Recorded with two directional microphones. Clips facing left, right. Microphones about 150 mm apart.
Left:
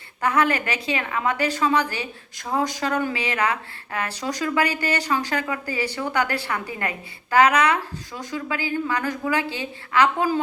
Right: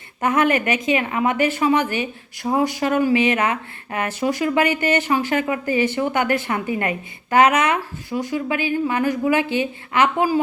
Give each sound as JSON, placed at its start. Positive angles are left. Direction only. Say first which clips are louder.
{"t": 0.2, "sound": "speech", "louder": "right 3 dB", "side_deg": -20}